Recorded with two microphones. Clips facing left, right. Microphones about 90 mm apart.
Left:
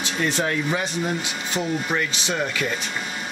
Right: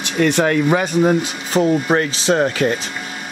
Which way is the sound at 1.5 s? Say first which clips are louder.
Right 10 dB; 40° right (ahead or behind).